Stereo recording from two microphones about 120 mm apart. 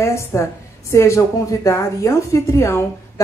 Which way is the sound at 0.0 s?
25° left (ahead or behind).